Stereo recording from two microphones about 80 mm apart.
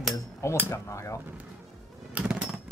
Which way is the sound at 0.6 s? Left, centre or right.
Left.